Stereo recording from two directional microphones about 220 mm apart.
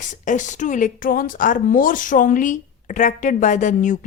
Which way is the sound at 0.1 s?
35° left (ahead or behind).